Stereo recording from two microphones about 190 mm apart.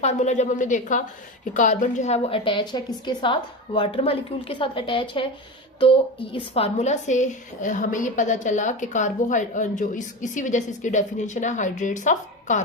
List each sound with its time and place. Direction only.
0.0 s a woman's voice: 40° left (ahead or behind)